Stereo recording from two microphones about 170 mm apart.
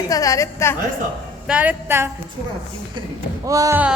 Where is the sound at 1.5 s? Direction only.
10° right (ahead or behind).